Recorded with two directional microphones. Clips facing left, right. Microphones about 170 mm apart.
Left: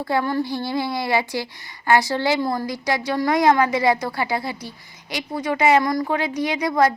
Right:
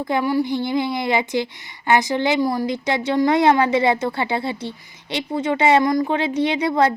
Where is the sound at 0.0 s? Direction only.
15° right (ahead or behind).